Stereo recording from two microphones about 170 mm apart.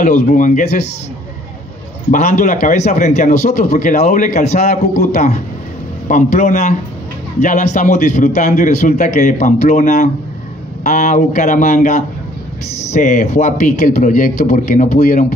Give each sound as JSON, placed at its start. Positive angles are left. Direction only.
{"t": 0.0, "sound": "a man's voice", "side_deg": 50}
{"t": 2.0, "sound": "a man's voice", "side_deg": 45}